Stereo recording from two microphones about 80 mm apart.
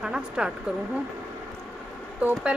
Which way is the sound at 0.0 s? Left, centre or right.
Centre.